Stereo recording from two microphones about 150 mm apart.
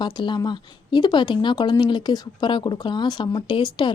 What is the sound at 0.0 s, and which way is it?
Speech, 30° left (ahead or behind).